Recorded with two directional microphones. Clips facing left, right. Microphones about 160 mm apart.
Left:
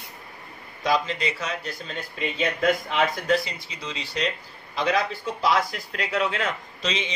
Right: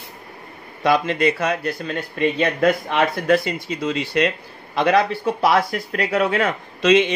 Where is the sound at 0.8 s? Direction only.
60° right (ahead or behind).